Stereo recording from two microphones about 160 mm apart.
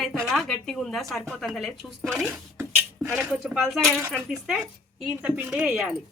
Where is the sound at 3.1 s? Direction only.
5° right (ahead or behind).